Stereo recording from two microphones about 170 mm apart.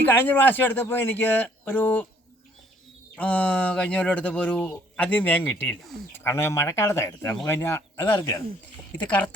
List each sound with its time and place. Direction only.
0.0 s speech: 10° left (ahead or behind)
3.2 s speech: 10° left (ahead or behind)